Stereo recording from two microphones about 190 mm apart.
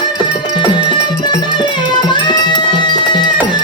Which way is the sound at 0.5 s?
25° left (ahead or behind).